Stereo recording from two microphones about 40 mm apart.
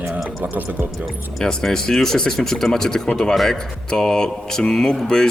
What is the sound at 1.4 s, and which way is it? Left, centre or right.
Speech, centre.